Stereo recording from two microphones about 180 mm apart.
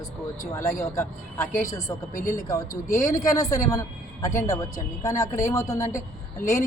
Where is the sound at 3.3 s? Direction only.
20° left (ahead or behind).